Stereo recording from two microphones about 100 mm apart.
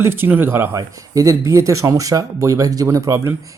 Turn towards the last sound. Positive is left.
turn(degrees=-35)  # may be behind; listen again after turning